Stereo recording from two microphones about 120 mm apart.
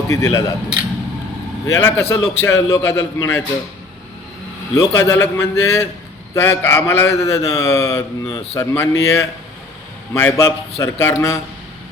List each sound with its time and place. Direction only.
0.1 s speech: 30° left (ahead or behind)
1.6 s a man's voice: 20° left (ahead or behind)
4.7 s a man's voice: 25° left (ahead or behind)